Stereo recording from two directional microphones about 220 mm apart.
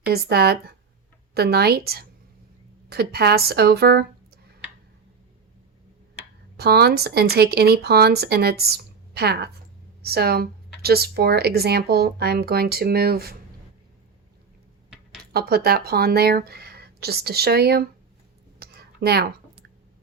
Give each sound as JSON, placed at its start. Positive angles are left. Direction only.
{"t": 0.1, "sound": "speech", "side_deg": -45}
{"t": 6.6, "sound": "speech", "side_deg": -45}
{"t": 15.2, "sound": "speech", "side_deg": -45}
{"t": 18.6, "sound": "a sound", "side_deg": -45}